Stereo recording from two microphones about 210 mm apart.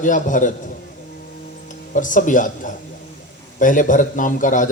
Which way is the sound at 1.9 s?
40° left (ahead or behind).